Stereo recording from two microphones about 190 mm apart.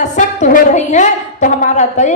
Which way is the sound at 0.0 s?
40° left (ahead or behind).